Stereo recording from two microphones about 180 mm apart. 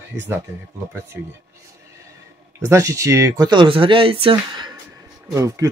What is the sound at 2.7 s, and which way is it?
Speech, 15° right (ahead or behind).